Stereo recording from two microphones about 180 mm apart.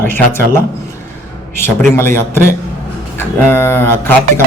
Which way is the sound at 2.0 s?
15° left (ahead or behind).